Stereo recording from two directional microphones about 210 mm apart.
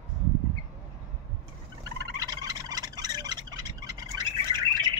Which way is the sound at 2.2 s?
20° right (ahead or behind).